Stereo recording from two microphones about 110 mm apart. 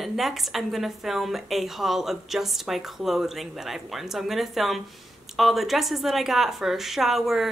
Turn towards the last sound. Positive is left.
turn(degrees=0)  # may be behind; listen again after turning